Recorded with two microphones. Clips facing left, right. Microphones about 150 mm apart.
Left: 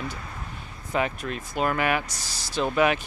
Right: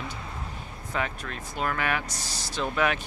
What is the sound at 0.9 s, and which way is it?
Speech, 15° left (ahead or behind).